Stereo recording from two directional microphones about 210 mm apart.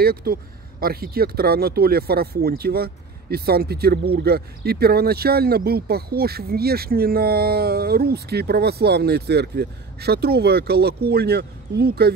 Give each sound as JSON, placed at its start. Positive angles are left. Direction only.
{"t": 0.0, "sound": "speech", "side_deg": -45}